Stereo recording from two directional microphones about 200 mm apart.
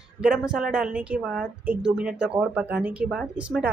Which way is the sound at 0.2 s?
5° right (ahead or behind).